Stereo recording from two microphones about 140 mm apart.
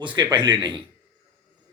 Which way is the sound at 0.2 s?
35° right (ahead or behind).